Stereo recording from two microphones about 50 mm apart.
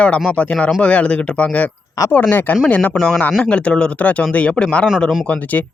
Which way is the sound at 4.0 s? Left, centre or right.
Left.